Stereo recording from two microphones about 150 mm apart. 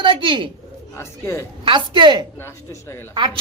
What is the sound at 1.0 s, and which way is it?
Speech, 20° left (ahead or behind).